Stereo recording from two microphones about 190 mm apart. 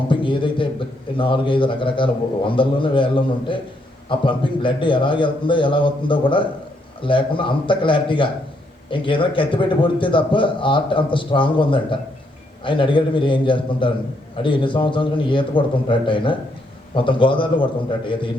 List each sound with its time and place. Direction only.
0.1 s a man's voice: 25° left (ahead or behind)